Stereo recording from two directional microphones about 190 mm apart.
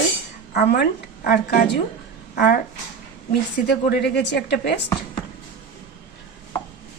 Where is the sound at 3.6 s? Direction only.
60° left (ahead or behind).